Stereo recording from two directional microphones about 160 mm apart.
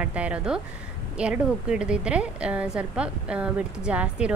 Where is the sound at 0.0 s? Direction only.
10° right (ahead or behind).